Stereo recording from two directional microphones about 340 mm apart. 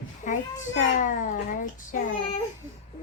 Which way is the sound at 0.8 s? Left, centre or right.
Left.